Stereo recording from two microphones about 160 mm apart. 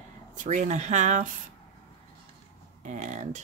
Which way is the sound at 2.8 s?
50° right (ahead or behind).